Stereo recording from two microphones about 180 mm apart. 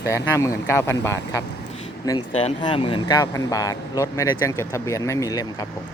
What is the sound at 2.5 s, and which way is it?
Speech, 30° left (ahead or behind).